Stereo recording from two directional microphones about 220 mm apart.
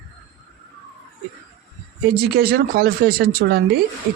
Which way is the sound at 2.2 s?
45° right (ahead or behind).